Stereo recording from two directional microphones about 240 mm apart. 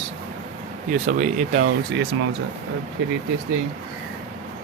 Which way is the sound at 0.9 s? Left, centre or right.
Right.